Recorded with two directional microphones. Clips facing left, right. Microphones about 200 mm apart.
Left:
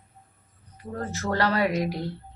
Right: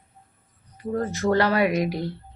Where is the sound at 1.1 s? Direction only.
15° right (ahead or behind).